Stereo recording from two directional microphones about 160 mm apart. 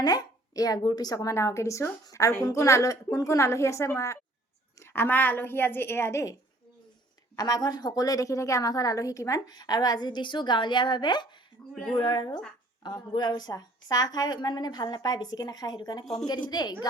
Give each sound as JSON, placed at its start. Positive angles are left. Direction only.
{"t": 0.0, "sound": "a woman's voice", "side_deg": 25}
{"t": 7.3, "sound": "a woman's voice", "side_deg": 25}
{"t": 11.7, "sound": "speech", "side_deg": 5}
{"t": 11.9, "sound": "a woman's voice", "side_deg": 30}